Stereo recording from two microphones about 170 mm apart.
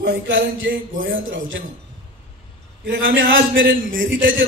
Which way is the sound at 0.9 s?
75° right (ahead or behind).